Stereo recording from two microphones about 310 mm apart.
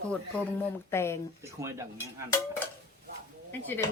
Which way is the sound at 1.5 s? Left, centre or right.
Centre.